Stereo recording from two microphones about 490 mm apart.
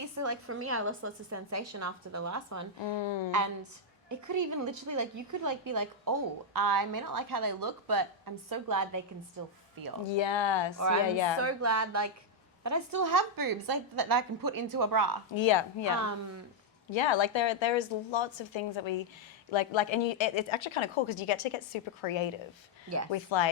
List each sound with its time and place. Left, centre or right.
0.0 s a woman's voice: right
2.8 s a woman's voice: left
4.1 s a woman's voice: right
10.1 s a woman's voice: left
10.8 s a woman's voice: right
11.0 s a woman's voice: left
11.3 s a woman's voice: right
15.4 s a woman's voice: left
16.0 s a woman's voice: right
16.9 s a woman's voice: left